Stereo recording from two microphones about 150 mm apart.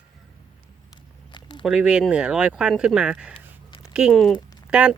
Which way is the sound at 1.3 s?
30° left (ahead or behind).